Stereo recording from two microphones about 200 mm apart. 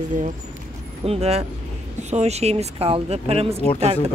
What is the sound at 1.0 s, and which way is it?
Speech, 30° right (ahead or behind).